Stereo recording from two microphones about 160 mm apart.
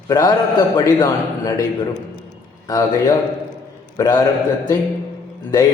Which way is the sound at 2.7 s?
20° left (ahead or behind).